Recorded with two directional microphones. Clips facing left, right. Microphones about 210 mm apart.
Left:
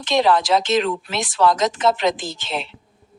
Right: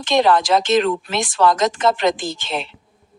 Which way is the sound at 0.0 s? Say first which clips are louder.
Right 2 dB; centre (ahead or behind).